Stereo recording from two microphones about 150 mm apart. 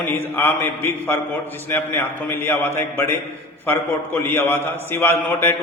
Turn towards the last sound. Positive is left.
turn(degrees=15)  # may be behind; listen again after turning